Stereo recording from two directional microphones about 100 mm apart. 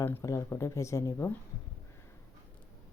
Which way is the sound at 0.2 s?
30° left (ahead or behind).